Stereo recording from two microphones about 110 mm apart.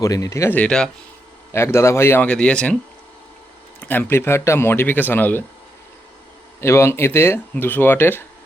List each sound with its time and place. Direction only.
0.0 s speech: 30° left (ahead or behind)
0.5 s speech: 10° left (ahead or behind)
1.5 s speech: 25° left (ahead or behind)
3.8 s speech: 20° left (ahead or behind)
6.6 s speech: 25° left (ahead or behind)